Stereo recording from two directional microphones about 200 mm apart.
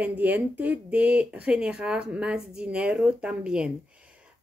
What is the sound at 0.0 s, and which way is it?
Speech, 10° right (ahead or behind).